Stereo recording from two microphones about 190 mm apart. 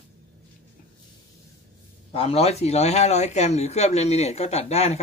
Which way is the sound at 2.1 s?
30° left (ahead or behind).